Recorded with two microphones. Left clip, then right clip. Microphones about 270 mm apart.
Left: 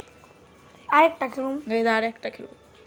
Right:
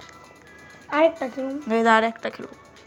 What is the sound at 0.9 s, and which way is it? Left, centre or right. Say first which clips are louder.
Speech: left 2 dB; left.